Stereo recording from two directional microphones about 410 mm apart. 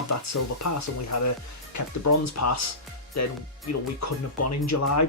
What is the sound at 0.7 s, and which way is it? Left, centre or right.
Speech, left.